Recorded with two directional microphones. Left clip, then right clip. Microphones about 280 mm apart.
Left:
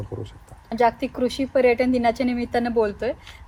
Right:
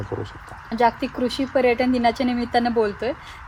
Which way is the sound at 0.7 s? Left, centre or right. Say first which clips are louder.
Even; centre.